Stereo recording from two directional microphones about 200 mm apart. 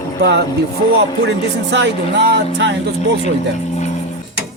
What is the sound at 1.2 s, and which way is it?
Speech, 60° right (ahead or behind).